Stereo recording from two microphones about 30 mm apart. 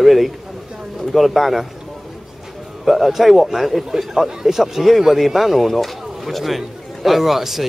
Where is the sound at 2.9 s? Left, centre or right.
Centre.